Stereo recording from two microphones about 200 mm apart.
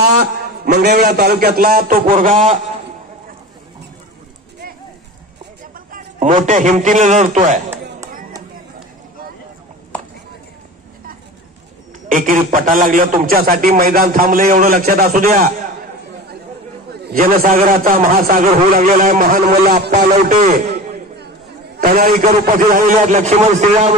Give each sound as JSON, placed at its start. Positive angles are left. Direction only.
{"t": 0.0, "sound": "a man's voice", "side_deg": -50}
{"t": 5.9, "sound": "a sound", "side_deg": -40}
{"t": 6.4, "sound": "a man's voice", "side_deg": -40}
{"t": 12.1, "sound": "a man's voice", "side_deg": -40}
{"t": 17.0, "sound": "a man's voice", "side_deg": -45}